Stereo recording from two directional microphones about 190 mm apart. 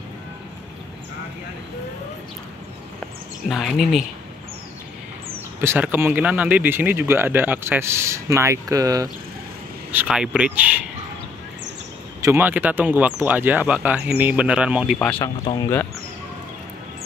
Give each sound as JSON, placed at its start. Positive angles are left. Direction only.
{"t": 3.4, "sound": "speech", "side_deg": 0}
{"t": 5.6, "sound": "speech", "side_deg": -10}
{"t": 9.8, "sound": "speech", "side_deg": -5}
{"t": 12.2, "sound": "speech", "side_deg": -10}
{"t": 15.1, "sound": "speech", "side_deg": 25}